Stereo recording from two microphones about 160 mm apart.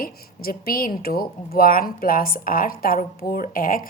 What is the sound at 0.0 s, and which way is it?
Speech, 65° left (ahead or behind).